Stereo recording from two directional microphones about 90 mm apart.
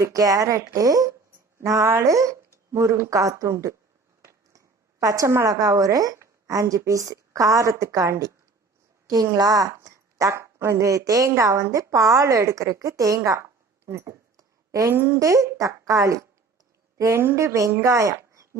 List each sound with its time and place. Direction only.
0.0 s a woman's voice: 40° right (ahead or behind)
13.4 s a sound: 30° right (ahead or behind)
14.9 s a woman's voice: 25° right (ahead or behind)